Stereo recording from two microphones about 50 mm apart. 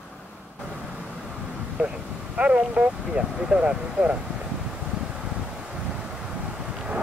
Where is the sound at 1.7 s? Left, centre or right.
Right.